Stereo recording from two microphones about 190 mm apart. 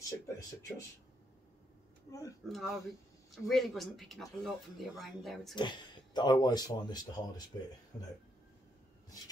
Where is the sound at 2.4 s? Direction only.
Centre (ahead or behind).